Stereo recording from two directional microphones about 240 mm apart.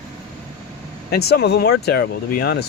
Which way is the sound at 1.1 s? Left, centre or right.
Left.